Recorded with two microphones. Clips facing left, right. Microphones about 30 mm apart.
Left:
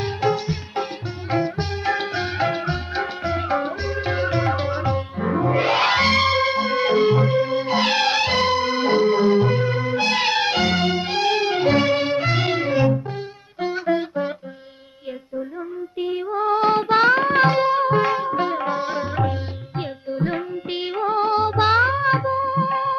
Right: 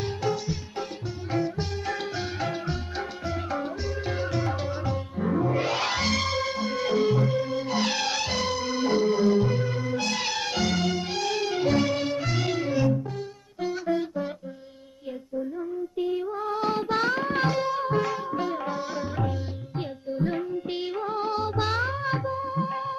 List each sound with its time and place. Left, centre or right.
0.0 s music: left
16.0 s music: left